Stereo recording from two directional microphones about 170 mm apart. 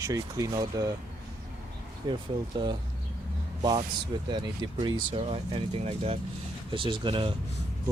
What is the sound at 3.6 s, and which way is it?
Speech, 25° right (ahead or behind).